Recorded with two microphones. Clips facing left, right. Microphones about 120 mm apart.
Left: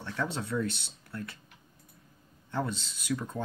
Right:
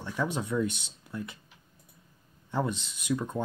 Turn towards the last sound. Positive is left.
turn(degrees=-15)  # may be behind; listen again after turning